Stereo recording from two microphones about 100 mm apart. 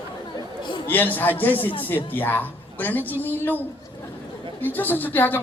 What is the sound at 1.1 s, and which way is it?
A woman's voice, 20° left (ahead or behind).